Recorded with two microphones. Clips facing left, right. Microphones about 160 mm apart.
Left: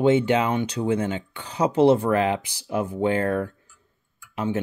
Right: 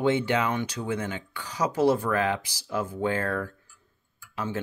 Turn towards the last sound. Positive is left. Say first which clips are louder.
# left 6 dB
turn(degrees=20)  # may be behind; listen again after turning